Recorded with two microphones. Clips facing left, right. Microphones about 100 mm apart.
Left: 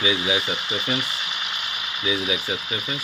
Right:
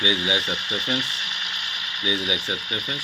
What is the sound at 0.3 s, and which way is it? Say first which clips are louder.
Speech: left 1 dB; 20° left (ahead or behind).